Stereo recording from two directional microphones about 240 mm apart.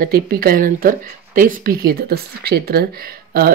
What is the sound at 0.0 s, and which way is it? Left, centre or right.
Speech, right.